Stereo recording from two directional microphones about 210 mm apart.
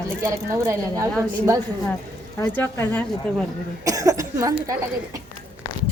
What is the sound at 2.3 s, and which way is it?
Speech, 10° left (ahead or behind).